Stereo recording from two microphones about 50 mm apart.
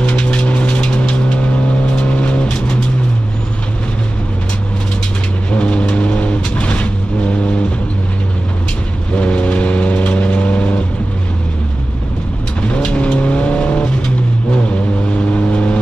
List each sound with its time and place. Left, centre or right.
0.0 s vehicle: left
5.5 s vehicle: left
9.1 s vehicle: left
12.6 s vehicle: left
15.3 s vehicle: left